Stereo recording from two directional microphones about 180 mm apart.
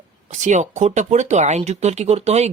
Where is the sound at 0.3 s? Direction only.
40° right (ahead or behind).